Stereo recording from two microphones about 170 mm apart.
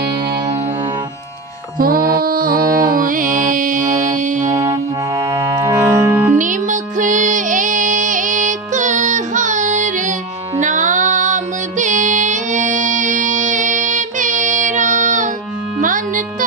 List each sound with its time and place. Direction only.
1.8 s mantra: 60° right (ahead or behind)
4.5 s music: 20° right (ahead or behind)
6.4 s music: 50° right (ahead or behind)